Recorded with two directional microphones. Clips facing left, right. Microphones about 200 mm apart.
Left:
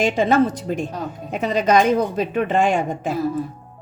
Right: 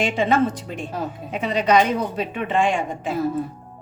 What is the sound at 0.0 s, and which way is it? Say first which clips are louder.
Speech: left 3 dB; 40° left (ahead or behind).